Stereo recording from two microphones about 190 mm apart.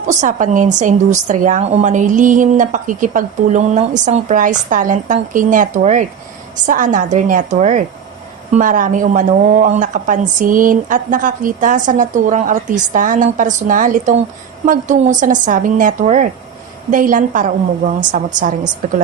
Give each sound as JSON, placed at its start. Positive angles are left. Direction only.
{"t": 0.1, "sound": "a woman's voice", "side_deg": -40}